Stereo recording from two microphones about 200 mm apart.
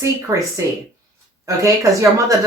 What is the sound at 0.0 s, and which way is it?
Speech, 15° right (ahead or behind).